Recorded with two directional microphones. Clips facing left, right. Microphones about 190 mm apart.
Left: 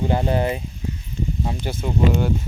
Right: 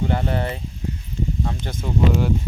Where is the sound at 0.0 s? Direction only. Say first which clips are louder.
Left 3 dB; 15° left (ahead or behind).